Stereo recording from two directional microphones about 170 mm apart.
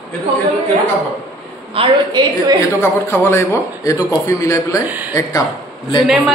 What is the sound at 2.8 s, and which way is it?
A man's voice, 15° left (ahead or behind).